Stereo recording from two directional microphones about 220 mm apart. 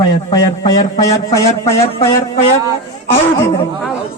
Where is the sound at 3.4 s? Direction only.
10° left (ahead or behind).